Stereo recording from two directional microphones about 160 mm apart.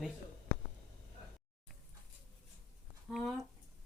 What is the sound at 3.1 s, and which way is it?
Speech, centre (ahead or behind).